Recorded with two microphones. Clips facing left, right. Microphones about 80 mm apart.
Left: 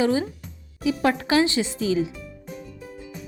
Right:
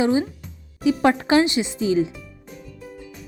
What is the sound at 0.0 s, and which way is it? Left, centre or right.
A woman's voice, right.